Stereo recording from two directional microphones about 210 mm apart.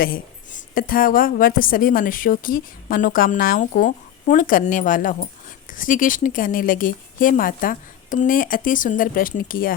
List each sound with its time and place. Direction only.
0.0 s a woman's voice: 45° left (ahead or behind)